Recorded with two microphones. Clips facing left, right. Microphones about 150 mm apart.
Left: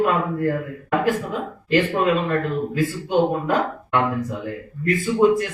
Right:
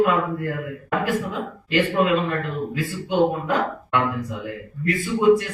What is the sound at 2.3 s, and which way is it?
Speech, 45° left (ahead or behind).